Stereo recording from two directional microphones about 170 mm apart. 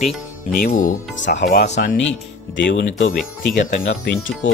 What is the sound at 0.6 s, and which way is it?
Speech, 50° left (ahead or behind).